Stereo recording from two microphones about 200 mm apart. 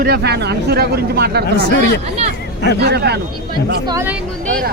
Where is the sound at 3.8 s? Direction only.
15° right (ahead or behind).